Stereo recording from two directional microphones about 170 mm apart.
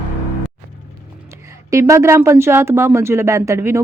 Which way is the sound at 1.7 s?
15° right (ahead or behind).